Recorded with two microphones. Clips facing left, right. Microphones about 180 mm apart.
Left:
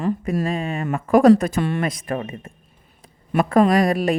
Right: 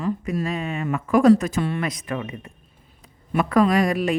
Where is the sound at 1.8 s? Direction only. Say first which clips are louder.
Left 3 dB; 45° left (ahead or behind).